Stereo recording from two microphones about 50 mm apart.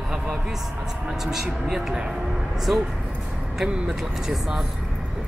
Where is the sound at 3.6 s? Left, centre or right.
Centre.